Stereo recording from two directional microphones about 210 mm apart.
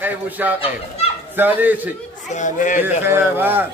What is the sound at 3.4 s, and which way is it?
Speech, 10° right (ahead or behind).